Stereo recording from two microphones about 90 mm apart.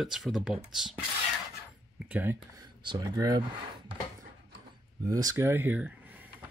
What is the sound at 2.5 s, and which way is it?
Speech, 45° right (ahead or behind).